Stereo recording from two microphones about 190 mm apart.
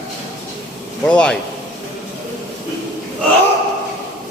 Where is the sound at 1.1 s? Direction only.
5° left (ahead or behind).